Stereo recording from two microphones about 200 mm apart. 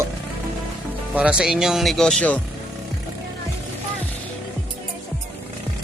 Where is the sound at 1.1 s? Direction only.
5° right (ahead or behind).